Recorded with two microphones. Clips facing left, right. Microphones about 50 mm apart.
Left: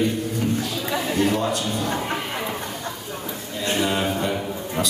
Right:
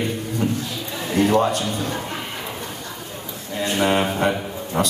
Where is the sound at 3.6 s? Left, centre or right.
Right.